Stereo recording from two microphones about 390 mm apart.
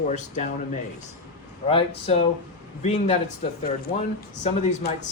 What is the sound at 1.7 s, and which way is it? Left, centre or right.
A man's voice, centre.